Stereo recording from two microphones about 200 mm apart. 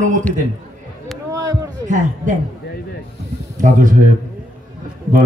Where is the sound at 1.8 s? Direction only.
40° right (ahead or behind).